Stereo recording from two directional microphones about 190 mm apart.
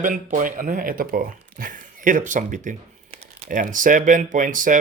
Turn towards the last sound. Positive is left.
turn(degrees=-45)  # may be behind; listen again after turning